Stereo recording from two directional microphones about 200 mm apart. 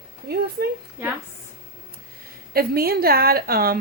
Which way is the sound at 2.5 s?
50° right (ahead or behind).